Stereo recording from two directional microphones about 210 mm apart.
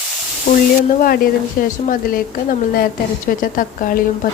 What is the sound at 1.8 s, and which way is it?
A woman's voice, 40° left (ahead or behind).